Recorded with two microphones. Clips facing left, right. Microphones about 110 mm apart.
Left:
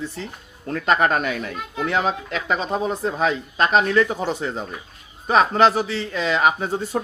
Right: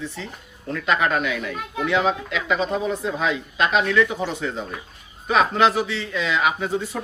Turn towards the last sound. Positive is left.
turn(degrees=40)  # may be behind; listen again after turning